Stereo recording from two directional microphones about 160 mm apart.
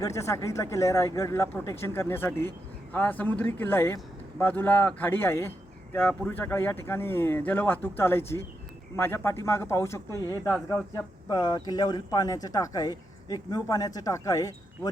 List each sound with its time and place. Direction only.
0.0 s a man's voice: 20° left (ahead or behind)